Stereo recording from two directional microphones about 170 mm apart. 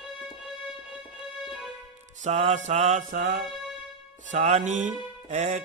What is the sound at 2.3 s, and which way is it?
Speech, 40° right (ahead or behind).